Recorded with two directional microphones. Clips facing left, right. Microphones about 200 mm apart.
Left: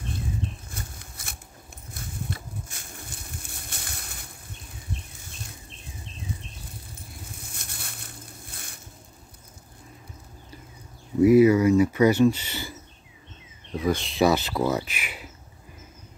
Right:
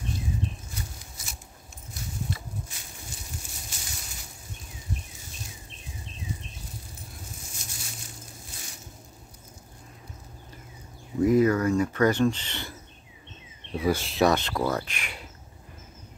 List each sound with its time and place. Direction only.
0.7 s a sound: 55° left (ahead or behind)
7.4 s crushing: 60° left (ahead or behind)
11.2 s speech: 10° left (ahead or behind)
13.7 s speech: 5° right (ahead or behind)